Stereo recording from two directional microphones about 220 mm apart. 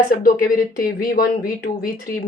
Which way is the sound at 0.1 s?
40° left (ahead or behind).